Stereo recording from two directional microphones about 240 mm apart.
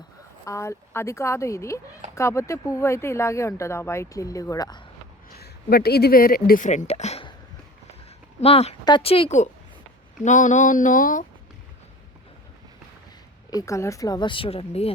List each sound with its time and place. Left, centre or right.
0.4 s speech: centre
5.3 s speech: left
8.4 s speech: left
13.5 s speech: centre